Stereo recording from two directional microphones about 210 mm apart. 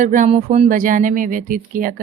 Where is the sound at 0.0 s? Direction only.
35° right (ahead or behind).